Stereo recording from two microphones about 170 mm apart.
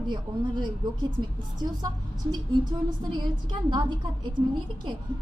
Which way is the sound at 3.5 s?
25° right (ahead or behind).